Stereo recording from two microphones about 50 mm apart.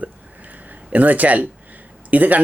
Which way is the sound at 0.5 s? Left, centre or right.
Right.